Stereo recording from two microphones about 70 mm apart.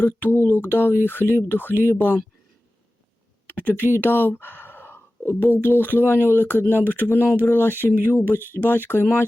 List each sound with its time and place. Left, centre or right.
0.0 s speech: left
3.5 s speech: left